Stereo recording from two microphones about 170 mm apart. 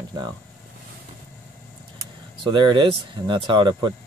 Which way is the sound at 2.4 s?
25° right (ahead or behind).